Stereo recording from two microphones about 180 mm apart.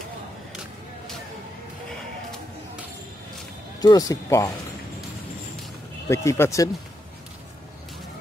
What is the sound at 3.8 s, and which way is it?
Speech, 20° left (ahead or behind).